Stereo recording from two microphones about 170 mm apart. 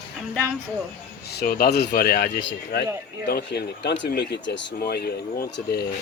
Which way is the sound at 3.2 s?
70° left (ahead or behind).